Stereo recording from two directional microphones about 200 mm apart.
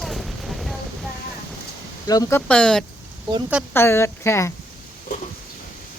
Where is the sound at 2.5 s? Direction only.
5° left (ahead or behind).